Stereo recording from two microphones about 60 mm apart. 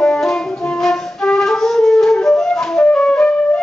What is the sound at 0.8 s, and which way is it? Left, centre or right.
Flute, centre.